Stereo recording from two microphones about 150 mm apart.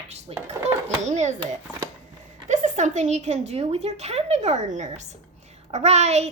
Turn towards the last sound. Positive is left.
turn(degrees=-50)  # may be behind; listen again after turning